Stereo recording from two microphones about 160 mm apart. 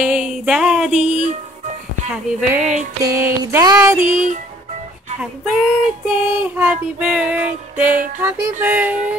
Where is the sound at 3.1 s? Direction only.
15° right (ahead or behind).